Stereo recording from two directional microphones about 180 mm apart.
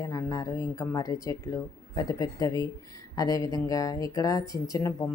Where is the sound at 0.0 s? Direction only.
20° left (ahead or behind).